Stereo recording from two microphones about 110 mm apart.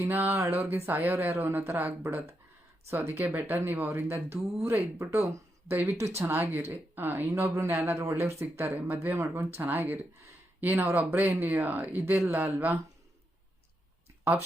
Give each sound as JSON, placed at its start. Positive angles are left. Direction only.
{"t": 0.0, "sound": "speech", "side_deg": -20}